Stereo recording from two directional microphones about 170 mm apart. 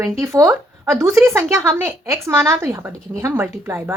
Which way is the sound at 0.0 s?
15° right (ahead or behind).